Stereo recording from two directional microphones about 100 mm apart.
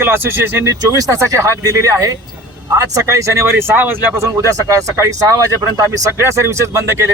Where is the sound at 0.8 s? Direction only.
35° right (ahead or behind).